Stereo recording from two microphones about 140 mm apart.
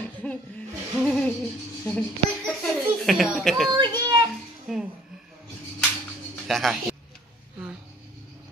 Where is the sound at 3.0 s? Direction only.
Centre (ahead or behind).